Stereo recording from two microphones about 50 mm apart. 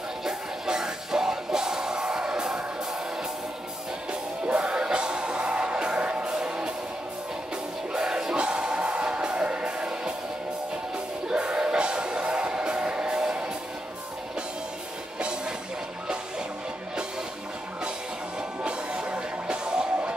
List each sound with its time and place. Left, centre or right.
0.2 s music: centre
4.1 s music: centre
7.9 s music: centre
11.2 s music: centre
15.1 s music: centre
18.6 s music: centre